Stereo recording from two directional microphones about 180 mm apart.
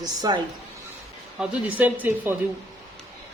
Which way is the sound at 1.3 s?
10° right (ahead or behind).